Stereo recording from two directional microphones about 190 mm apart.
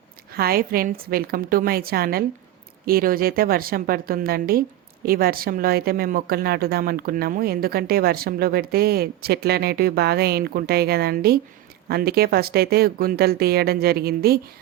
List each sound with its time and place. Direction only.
0.3 s speech: 55° right (ahead or behind)